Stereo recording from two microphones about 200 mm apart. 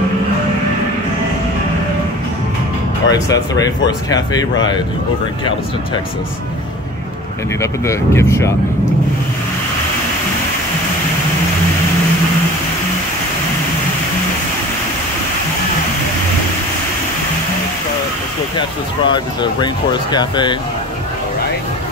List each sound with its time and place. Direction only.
3.1 s speech: 20° left (ahead or behind)
7.6 s speech: 15° left (ahead or behind)
19.0 s speech: 20° left (ahead or behind)